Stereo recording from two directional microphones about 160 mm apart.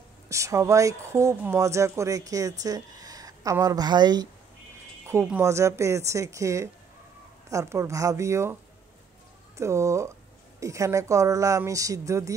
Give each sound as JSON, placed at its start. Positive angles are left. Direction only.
{"t": 0.3, "sound": "speech", "side_deg": -20}
{"t": 9.6, "sound": "speech", "side_deg": -20}